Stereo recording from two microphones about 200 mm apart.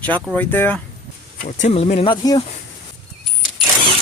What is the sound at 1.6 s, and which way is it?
Speech, 30° left (ahead or behind).